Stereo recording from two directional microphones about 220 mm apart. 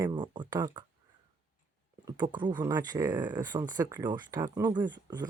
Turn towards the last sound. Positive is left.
turn(degrees=-20)  # may be behind; listen again after turning